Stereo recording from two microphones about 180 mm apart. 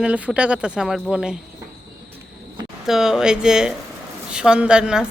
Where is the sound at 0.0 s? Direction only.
5° right (ahead or behind).